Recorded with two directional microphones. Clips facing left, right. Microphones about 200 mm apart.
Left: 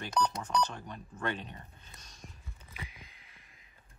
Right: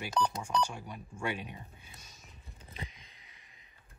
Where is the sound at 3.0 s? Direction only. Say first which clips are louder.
Left 4 dB; centre (ahead or behind).